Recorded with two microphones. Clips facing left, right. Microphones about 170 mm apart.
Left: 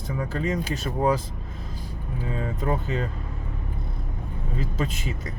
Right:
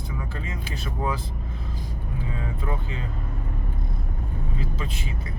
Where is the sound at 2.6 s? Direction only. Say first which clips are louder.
Left 6 dB; 40° left (ahead or behind).